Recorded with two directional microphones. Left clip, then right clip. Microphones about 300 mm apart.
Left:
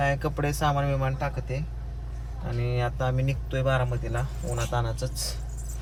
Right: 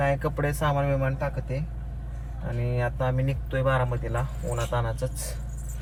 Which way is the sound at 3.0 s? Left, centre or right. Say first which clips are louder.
Right 1 dB; centre.